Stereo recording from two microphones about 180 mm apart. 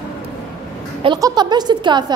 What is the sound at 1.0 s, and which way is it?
A woman's voice, 25° right (ahead or behind).